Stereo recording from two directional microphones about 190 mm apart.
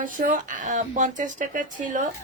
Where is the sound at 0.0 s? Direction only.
45° right (ahead or behind).